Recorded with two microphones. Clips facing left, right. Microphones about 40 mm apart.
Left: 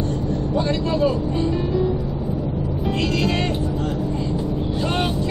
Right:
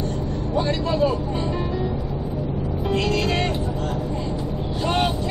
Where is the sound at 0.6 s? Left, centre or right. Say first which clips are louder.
Even; centre.